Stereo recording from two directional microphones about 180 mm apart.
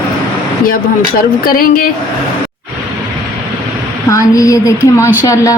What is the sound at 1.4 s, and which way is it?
Speech, 55° left (ahead or behind).